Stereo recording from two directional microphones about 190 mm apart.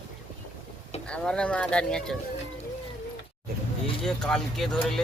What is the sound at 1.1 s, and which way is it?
Speech, 5° left (ahead or behind).